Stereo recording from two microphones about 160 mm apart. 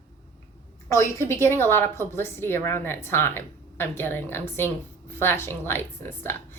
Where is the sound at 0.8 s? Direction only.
15° left (ahead or behind).